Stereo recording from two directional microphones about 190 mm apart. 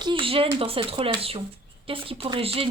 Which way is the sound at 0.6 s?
30° right (ahead or behind).